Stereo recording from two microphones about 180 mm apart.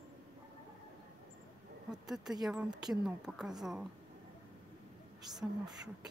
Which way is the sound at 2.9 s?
Centre (ahead or behind).